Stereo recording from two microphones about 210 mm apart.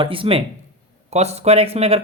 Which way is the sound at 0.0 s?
25° right (ahead or behind).